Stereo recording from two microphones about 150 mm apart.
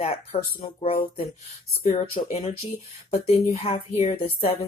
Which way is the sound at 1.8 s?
50° left (ahead or behind).